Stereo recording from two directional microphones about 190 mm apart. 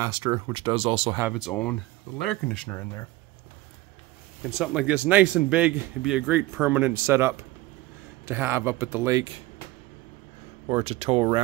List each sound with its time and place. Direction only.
0.0 s speech: 20° right (ahead or behind)
1.3 s speech: centre (ahead or behind)
4.6 s speech: 5° right (ahead or behind)
10.7 s speech: 30° right (ahead or behind)